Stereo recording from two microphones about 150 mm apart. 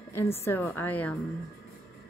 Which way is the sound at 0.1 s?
20° left (ahead or behind).